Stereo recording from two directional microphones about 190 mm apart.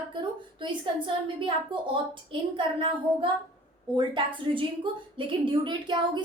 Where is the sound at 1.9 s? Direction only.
25° right (ahead or behind).